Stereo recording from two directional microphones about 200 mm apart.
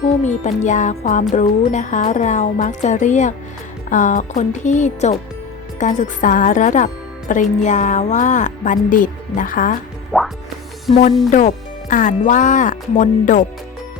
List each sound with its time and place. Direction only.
0.2 s speech: 35° left (ahead or behind)
10.1 s music: centre (ahead or behind)
11.3 s speech: 40° left (ahead or behind)